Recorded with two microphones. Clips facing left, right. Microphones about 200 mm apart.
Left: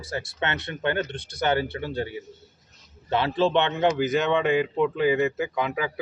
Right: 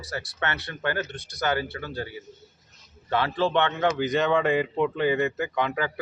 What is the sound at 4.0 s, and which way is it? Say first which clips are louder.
Speech: even; centre (ahead or behind).